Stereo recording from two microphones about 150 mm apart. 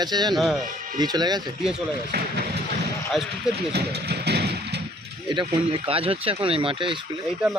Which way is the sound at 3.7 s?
90° right.